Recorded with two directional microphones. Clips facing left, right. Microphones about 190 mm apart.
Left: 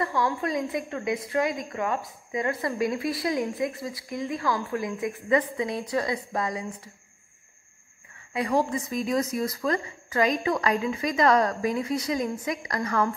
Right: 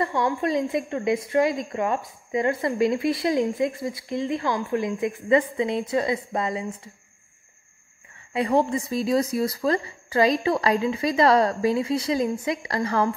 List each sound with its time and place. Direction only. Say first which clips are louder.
0.0 s speech: right 3 dB; 20° right (ahead or behind)
8.3 s speech: right 3 dB; 25° right (ahead or behind)